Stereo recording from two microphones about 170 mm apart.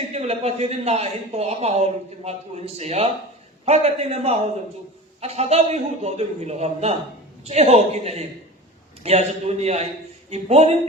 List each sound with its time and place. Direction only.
0.1 s speech: 40° right (ahead or behind)